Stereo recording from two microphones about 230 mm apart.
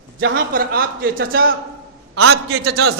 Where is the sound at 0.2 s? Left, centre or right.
Right.